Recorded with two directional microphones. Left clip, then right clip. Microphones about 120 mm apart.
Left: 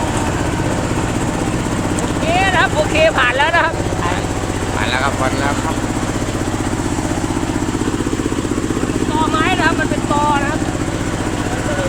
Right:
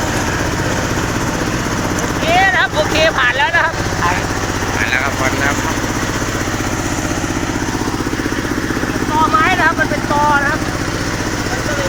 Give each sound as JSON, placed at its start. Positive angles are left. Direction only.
{"t": 2.5, "sound": "vehicle", "side_deg": 55}